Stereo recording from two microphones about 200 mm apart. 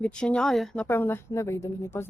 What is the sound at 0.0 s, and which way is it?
A woman's voice, 5° left (ahead or behind).